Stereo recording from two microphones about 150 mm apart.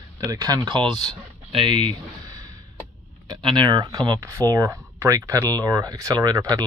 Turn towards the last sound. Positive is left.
turn(degrees=-25)  # may be behind; listen again after turning